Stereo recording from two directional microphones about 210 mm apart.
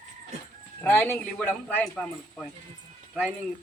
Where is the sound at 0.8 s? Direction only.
10° left (ahead or behind).